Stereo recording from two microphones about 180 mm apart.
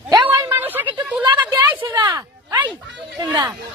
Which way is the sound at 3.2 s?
20° right (ahead or behind).